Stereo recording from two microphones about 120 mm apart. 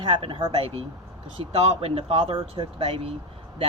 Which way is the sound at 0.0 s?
45° right (ahead or behind).